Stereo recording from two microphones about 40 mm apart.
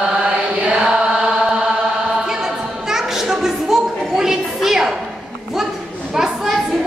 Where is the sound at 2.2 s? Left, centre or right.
Centre.